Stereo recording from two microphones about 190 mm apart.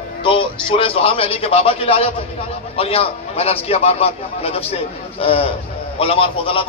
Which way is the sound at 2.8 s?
30° left (ahead or behind).